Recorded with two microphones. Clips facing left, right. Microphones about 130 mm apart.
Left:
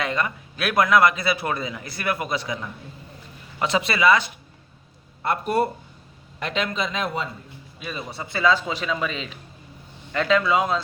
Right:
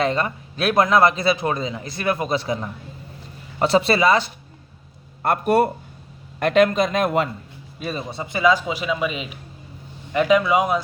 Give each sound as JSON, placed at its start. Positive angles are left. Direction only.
{"t": 0.0, "sound": "a man's voice", "side_deg": -30}
{"t": 5.2, "sound": "speech", "side_deg": -50}
{"t": 7.8, "sound": "speech", "side_deg": -40}
{"t": 8.0, "sound": "speech", "side_deg": -20}